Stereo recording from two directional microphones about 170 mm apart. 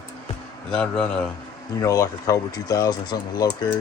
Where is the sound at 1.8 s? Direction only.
20° left (ahead or behind).